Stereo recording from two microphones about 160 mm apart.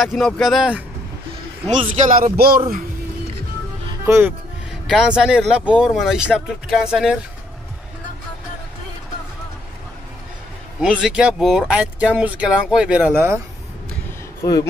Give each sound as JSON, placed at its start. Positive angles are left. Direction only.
{"t": 0.0, "sound": "speech", "side_deg": 0}
{"t": 2.0, "sound": "speech", "side_deg": -55}
{"t": 2.3, "sound": "a man's voice", "side_deg": -70}
{"t": 4.0, "sound": "speech", "side_deg": -15}
{"t": 4.8, "sound": "speech", "side_deg": -5}
{"t": 10.8, "sound": "speech", "side_deg": -5}
{"t": 14.4, "sound": "speech", "side_deg": 20}